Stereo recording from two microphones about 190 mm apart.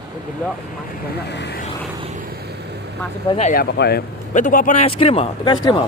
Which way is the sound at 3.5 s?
55° left (ahead or behind).